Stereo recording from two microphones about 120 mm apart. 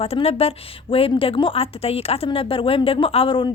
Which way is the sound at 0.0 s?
55° left (ahead or behind).